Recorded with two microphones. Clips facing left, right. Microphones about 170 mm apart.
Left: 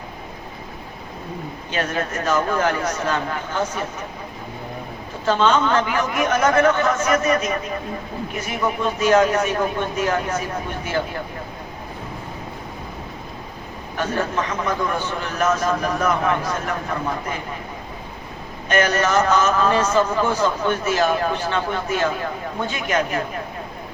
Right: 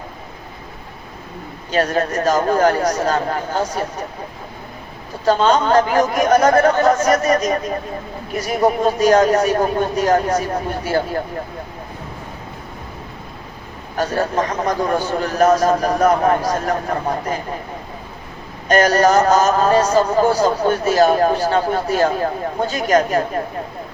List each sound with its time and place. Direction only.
1.7 s a man's voice: 40° right (ahead or behind)
5.2 s a man's voice: 40° right (ahead or behind)
13.9 s a man's voice: 40° right (ahead or behind)
18.7 s a man's voice: 40° right (ahead or behind)